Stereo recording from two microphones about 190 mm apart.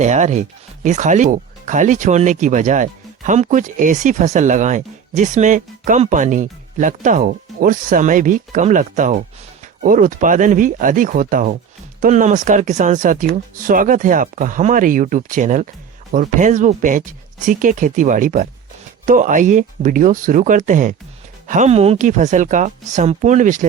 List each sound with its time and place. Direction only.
0.0 s speech: 40° right (ahead or behind)